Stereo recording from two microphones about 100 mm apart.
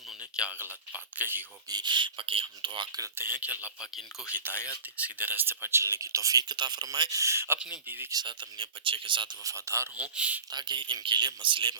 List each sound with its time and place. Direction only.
0.2 s speech: 10° right (ahead or behind)
1.7 s speech: 50° right (ahead or behind)
3.0 s speech: 20° right (ahead or behind)
4.5 s speech: 25° left (ahead or behind)
4.9 s speech: 15° right (ahead or behind); by 7.2 s 40° right (ahead or behind)
7.2 s speech: 25° right (ahead or behind)
8.1 s speech: 50° right (ahead or behind)
9.4 s speech: 35° right (ahead or behind)
10.0 s speech: 15° right (ahead or behind)
10.5 s speech: 45° right (ahead or behind)